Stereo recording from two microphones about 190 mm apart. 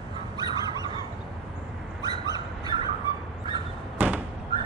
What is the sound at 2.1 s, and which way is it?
Bird, 20° right (ahead or behind).